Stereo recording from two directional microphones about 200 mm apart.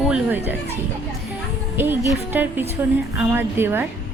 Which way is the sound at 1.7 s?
10° right (ahead or behind).